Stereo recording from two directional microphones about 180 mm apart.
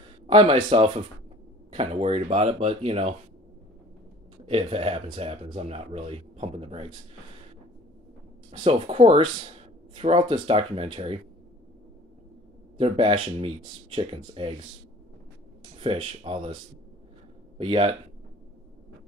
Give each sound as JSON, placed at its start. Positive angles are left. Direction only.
{"t": 0.3, "sound": "speech", "side_deg": -30}
{"t": 4.5, "sound": "speech", "side_deg": -35}
{"t": 8.5, "sound": "speech", "side_deg": -30}
{"t": 12.7, "sound": "speech", "side_deg": -35}
{"t": 15.8, "sound": "speech", "side_deg": -30}
{"t": 17.6, "sound": "speech", "side_deg": -30}